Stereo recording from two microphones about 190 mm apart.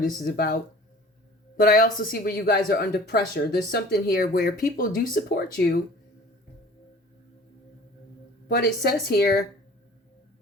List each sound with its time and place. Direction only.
0.0 s speech: 50° left (ahead or behind)
8.4 s speech: 55° left (ahead or behind)